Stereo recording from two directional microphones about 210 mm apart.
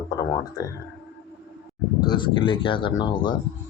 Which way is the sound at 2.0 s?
20° left (ahead or behind).